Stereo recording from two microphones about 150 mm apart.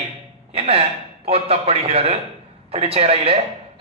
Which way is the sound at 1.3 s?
40° right (ahead or behind).